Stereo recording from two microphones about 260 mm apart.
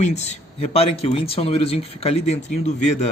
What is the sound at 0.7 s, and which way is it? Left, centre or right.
Speech, left.